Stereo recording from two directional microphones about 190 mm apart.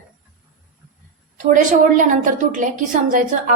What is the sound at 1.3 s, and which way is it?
A woman's voice, 40° right (ahead or behind).